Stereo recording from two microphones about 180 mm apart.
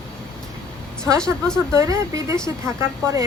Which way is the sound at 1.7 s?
20° right (ahead or behind).